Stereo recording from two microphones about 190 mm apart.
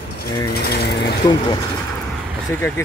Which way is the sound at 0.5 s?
55° left (ahead or behind).